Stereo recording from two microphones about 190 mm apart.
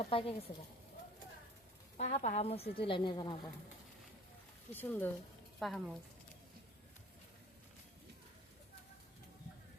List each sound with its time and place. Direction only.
0.0 s a woman's voice: 30° left (ahead or behind)
2.0 s a woman's voice: 35° left (ahead or behind)
4.7 s speech: 10° left (ahead or behind)